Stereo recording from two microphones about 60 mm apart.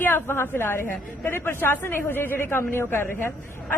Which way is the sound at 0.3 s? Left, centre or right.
Left.